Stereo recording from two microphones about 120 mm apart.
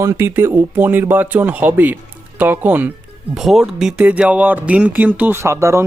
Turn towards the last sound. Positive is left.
turn(degrees=-25)  # may be behind; listen again after turning